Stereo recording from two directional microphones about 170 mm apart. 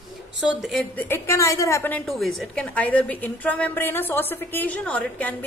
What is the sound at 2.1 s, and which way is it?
A woman's voice, centre (ahead or behind).